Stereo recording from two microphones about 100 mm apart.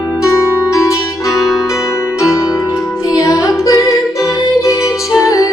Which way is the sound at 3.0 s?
30° left (ahead or behind).